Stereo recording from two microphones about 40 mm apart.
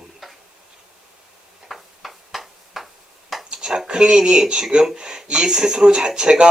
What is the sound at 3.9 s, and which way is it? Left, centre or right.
Speech, right.